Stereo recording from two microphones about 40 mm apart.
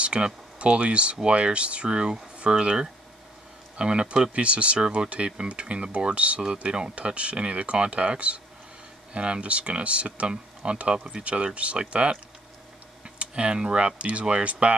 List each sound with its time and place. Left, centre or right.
0.0 s speech: right
13.2 s speech: right